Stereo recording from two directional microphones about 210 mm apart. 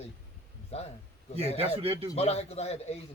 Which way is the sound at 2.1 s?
30° left (ahead or behind).